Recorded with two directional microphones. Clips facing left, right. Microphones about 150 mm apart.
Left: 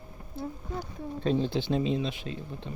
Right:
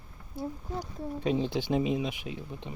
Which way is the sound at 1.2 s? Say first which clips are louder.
Left 2 dB; 15° right (ahead or behind).